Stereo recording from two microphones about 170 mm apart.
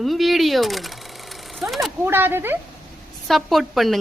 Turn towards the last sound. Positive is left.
turn(degrees=0)  # may be behind; listen again after turning